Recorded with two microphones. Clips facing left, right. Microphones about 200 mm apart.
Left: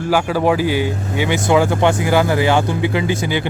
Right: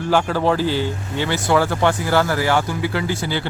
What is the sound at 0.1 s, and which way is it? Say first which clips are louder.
A man's voice: left 2 dB; 10° left (ahead or behind).